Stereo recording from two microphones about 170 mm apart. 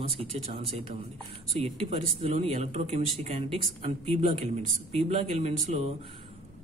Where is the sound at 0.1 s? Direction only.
35° right (ahead or behind).